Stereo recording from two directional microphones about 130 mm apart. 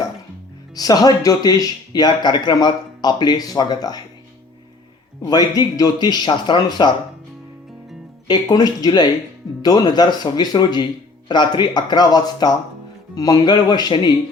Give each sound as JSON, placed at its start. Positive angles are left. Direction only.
{"t": 0.8, "sound": "speech", "side_deg": 30}
{"t": 5.2, "sound": "speech", "side_deg": 30}
{"t": 8.3, "sound": "speech", "side_deg": 30}